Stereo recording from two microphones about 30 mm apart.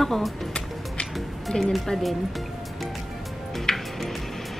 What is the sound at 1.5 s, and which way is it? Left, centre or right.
Speech, centre.